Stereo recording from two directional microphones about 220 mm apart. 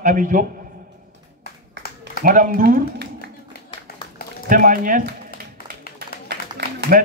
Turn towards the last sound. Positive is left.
turn(degrees=-45)  # may be behind; listen again after turning